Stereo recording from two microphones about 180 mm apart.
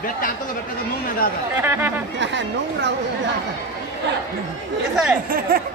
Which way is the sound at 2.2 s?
85° right.